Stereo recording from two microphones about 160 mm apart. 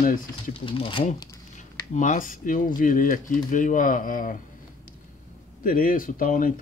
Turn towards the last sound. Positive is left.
turn(degrees=60)  # may be behind; listen again after turning